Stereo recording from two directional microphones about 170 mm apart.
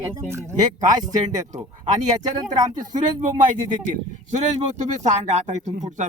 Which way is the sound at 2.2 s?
20° right (ahead or behind).